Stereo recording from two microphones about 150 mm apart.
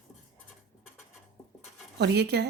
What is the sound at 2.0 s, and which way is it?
Speech, 90° right.